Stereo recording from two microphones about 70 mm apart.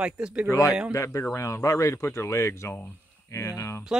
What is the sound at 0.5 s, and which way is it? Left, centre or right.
Speech, left.